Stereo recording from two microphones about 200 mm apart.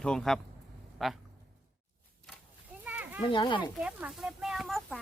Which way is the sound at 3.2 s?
25° left (ahead or behind).